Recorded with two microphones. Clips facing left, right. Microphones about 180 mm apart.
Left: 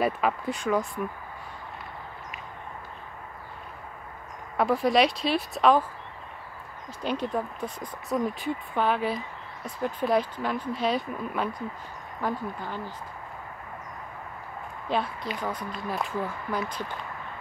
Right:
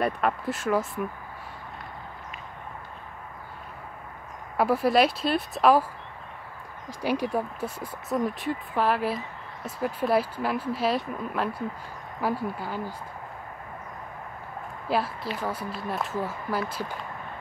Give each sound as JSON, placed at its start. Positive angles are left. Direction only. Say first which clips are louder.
{"t": 0.0, "sound": "speech", "louder": "even", "side_deg": 0}
{"t": 4.6, "sound": "speech", "louder": "right 1 dB", "side_deg": -5}
{"t": 6.9, "sound": "speech", "louder": "right 2 dB", "side_deg": -10}
{"t": 14.9, "sound": "speech", "louder": "right 1 dB", "side_deg": -5}